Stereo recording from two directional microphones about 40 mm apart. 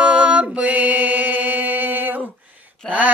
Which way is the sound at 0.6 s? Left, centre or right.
Right.